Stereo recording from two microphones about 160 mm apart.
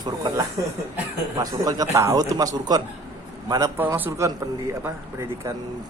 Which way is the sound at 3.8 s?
10° right (ahead or behind).